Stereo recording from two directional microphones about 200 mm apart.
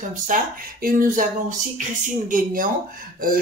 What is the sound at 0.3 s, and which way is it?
Speech, 40° right (ahead or behind).